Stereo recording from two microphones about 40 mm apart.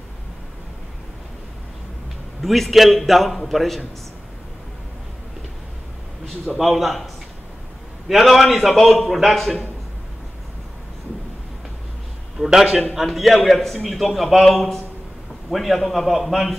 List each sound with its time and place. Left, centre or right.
2.4 s a man's voice: centre
6.4 s a man's voice: centre
8.1 s a man's voice: centre
12.4 s a man's voice: centre
12.9 s a man's voice: centre